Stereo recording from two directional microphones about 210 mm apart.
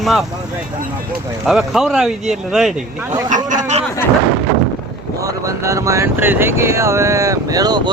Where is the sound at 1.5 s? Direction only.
Centre (ahead or behind).